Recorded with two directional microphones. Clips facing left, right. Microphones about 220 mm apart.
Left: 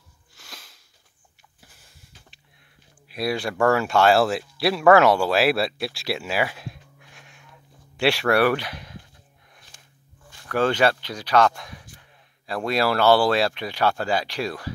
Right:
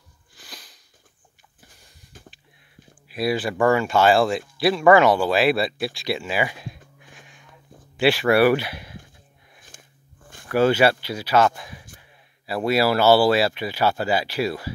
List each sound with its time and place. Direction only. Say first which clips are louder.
0.3 s sniff: right 2 dB; centre (ahead or behind)
1.8 s a sound: right 1 dB; centre (ahead or behind)
3.1 s speech: right 2 dB; centre (ahead or behind)
9.7 s biting: right 5 dB; 50° right (ahead or behind)
10.5 s speech: right 3 dB; 10° right (ahead or behind)